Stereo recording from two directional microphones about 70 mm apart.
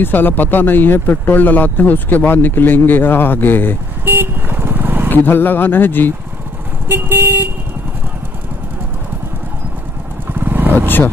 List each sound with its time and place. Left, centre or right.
0.0 s speech: left
4.0 s vehicle: right
5.1 s speech: left
6.9 s vehicle: right
10.3 s vehicle: right